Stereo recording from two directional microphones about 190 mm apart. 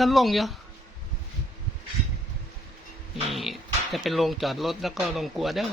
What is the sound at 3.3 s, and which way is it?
Speech, centre (ahead or behind).